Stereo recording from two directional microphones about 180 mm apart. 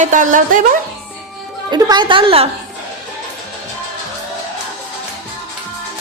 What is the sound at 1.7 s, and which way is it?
Speech, 25° right (ahead or behind).